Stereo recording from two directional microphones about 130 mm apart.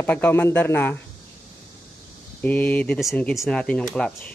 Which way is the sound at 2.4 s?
10° left (ahead or behind).